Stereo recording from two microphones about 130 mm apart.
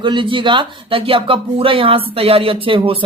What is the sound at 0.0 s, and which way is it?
A woman's voice, 40° right (ahead or behind).